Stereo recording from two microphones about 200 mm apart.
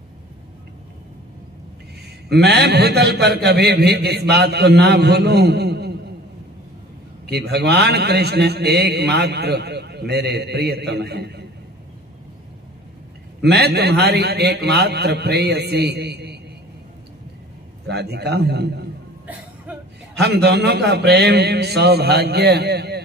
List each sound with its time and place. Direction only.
2.2 s a man's voice: 55° right (ahead or behind)
7.2 s a man's voice: 55° right (ahead or behind)
13.4 s a man's voice: 55° right (ahead or behind)
17.8 s a man's voice: 55° right (ahead or behind)
19.2 s cough: 10° right (ahead or behind)
20.2 s a man's voice: 55° right (ahead or behind)